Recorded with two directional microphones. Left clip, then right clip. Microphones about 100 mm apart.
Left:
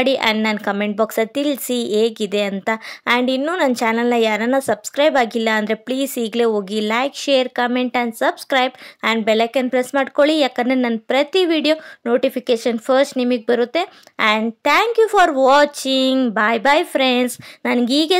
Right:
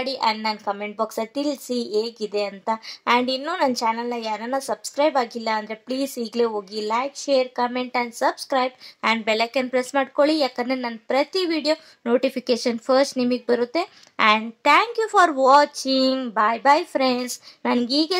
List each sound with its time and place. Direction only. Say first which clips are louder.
0.0 s speech: left 6 dB; 55° left (ahead or behind)
3.1 s a woman's voice: left 3 dB; 40° left (ahead or behind)
10.3 s a woman's voice: left 5 dB; 55° left (ahead or behind)